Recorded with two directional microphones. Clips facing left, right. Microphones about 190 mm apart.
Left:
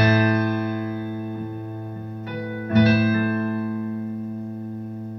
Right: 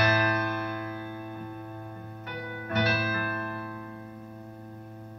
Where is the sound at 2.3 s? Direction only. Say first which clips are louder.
Left 9 dB; 35° left (ahead or behind).